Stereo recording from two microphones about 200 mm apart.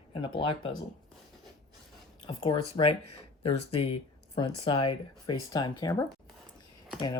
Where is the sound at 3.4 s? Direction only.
30° left (ahead or behind).